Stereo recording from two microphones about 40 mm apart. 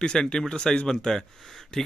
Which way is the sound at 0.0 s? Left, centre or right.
Left.